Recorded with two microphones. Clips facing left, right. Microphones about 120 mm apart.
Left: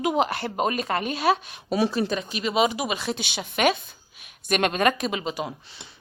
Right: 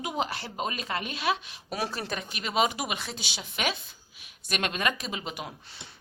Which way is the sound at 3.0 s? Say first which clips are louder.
Left 9 dB; 65° left (ahead or behind).